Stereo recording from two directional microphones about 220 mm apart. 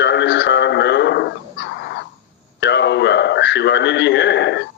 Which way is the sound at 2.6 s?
50° left (ahead or behind).